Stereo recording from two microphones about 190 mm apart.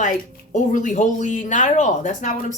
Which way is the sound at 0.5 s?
40° left (ahead or behind).